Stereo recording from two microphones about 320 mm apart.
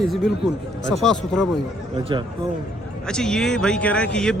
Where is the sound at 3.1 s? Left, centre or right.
Centre.